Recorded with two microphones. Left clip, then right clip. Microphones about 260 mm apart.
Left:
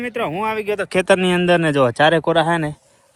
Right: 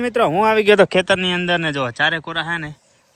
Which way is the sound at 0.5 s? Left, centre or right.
Right.